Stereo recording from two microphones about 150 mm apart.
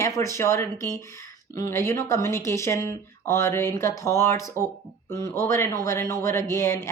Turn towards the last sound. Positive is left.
turn(degrees=20)  # may be behind; listen again after turning